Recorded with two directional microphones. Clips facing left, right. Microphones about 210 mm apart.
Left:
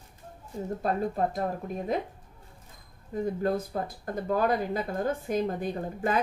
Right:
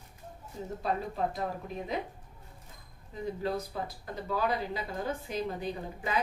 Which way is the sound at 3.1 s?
50° left (ahead or behind).